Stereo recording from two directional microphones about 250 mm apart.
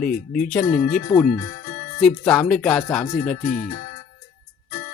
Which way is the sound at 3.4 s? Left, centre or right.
Left.